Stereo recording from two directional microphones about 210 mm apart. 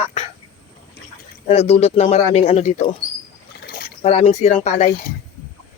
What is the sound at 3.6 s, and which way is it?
Rowboat, 45° left (ahead or behind).